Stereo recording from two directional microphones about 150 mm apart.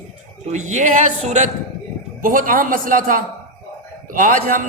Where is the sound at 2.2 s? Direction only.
65° right (ahead or behind).